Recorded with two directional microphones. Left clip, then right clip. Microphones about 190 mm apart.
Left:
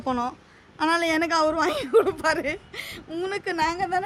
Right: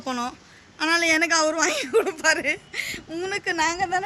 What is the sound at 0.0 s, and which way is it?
A woman's voice, 20° left (ahead or behind).